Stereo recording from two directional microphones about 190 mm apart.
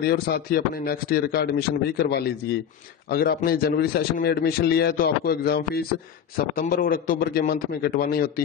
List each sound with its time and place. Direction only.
0.0 s a man's voice: 55° left (ahead or behind)